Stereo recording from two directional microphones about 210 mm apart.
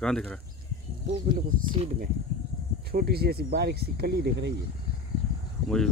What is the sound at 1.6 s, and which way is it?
Speech, 25° right (ahead or behind).